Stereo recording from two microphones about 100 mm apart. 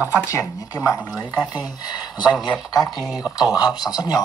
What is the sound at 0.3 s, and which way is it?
Speech, 35° left (ahead or behind).